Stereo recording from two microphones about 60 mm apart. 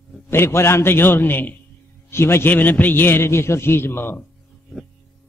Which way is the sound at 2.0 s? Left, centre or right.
Left.